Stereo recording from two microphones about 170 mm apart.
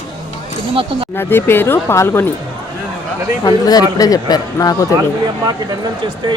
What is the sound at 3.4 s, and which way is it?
Speech, 25° left (ahead or behind).